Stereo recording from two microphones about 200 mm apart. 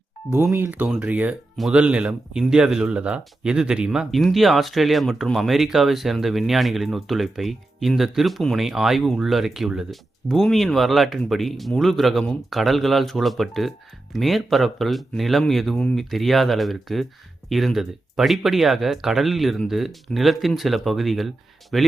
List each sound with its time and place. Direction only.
0.5 s speech: 10° right (ahead or behind)